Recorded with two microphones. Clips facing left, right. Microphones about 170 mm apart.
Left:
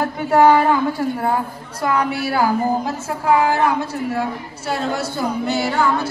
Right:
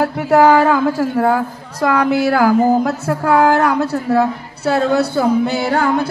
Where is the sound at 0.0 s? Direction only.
85° right.